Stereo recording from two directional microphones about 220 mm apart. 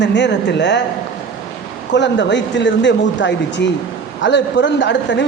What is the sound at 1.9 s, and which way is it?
Speech, 55° left (ahead or behind).